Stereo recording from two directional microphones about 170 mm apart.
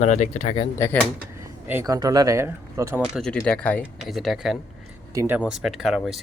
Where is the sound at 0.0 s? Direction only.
45° left (ahead or behind).